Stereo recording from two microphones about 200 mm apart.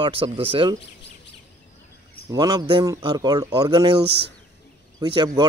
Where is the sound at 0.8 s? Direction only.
60° left (ahead or behind).